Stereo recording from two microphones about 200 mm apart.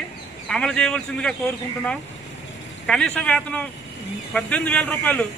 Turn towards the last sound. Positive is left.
turn(degrees=5)  # may be behind; listen again after turning